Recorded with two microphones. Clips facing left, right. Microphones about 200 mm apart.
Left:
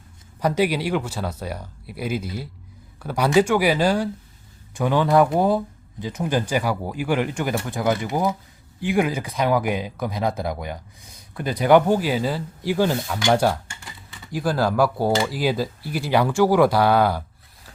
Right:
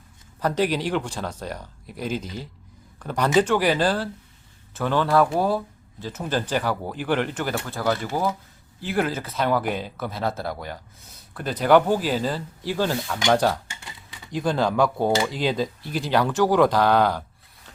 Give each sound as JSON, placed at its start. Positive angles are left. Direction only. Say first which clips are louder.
{"t": 0.3, "sound": "speech", "louder": "left 2 dB", "side_deg": 10}